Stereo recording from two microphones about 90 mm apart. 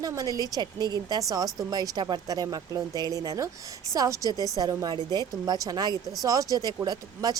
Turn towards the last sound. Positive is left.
turn(degrees=-45)  # may be behind; listen again after turning